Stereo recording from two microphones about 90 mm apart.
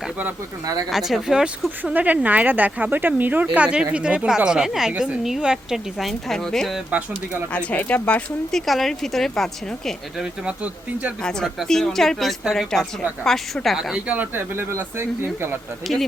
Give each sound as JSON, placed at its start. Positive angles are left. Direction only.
{"t": 0.6, "sound": "speech", "side_deg": -40}
{"t": 0.9, "sound": "a woman's voice", "side_deg": 0}
{"t": 1.8, "sound": "a woman's voice", "side_deg": -20}
{"t": 7.5, "sound": "speech", "side_deg": 15}
{"t": 8.6, "sound": "a woman's voice", "side_deg": 0}
{"t": 10.4, "sound": "speech", "side_deg": -15}
{"t": 11.2, "sound": "a woman's voice", "side_deg": 5}
{"t": 14.1, "sound": "speech", "side_deg": -20}